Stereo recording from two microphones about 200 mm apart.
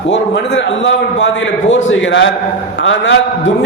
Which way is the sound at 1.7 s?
70° left (ahead or behind).